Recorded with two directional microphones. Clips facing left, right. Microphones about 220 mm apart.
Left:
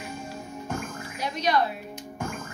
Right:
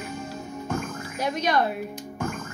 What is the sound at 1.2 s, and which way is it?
Speech, 50° right (ahead or behind).